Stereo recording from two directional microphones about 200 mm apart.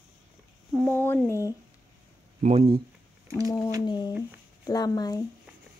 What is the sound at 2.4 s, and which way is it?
Speech, 30° right (ahead or behind).